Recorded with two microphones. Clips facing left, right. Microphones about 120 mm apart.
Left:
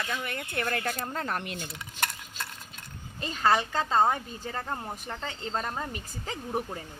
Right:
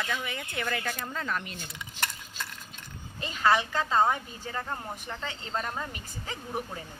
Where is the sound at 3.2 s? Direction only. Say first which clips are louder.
Even; 35° left (ahead or behind).